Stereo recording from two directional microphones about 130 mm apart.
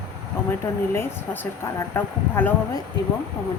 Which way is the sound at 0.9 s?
20° left (ahead or behind).